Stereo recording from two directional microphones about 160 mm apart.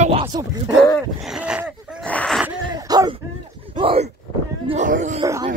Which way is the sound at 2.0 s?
5° left (ahead or behind).